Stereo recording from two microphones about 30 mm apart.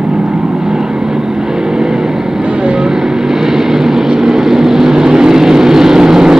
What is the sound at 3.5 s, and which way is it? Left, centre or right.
Vehicle, centre.